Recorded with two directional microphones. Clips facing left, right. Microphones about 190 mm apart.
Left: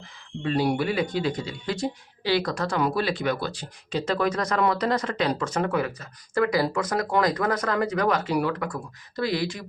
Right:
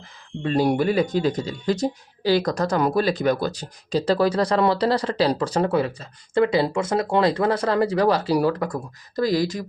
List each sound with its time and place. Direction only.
0.4 s speech: 45° right (ahead or behind)